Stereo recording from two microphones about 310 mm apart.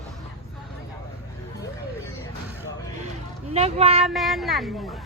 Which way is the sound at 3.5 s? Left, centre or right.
Centre.